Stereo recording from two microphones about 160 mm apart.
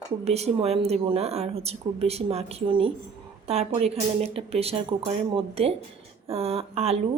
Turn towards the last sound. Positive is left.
turn(degrees=-40)  # may be behind; listen again after turning